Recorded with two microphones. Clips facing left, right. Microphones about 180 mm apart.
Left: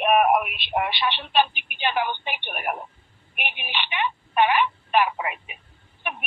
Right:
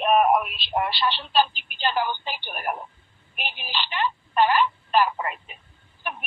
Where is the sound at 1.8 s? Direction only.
15° left (ahead or behind).